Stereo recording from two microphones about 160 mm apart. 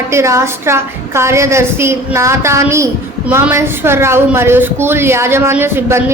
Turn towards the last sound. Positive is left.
turn(degrees=-15)  # may be behind; listen again after turning